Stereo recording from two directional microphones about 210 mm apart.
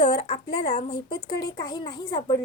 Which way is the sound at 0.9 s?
20° left (ahead or behind).